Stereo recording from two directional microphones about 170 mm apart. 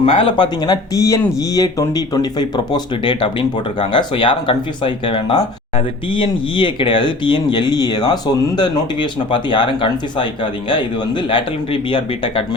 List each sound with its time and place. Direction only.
0.0 s speech: 30° left (ahead or behind)